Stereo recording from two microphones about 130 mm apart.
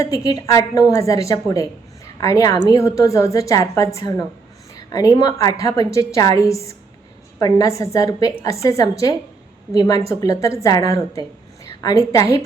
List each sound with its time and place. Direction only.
0.0 s a woman's voice: 30° left (ahead or behind)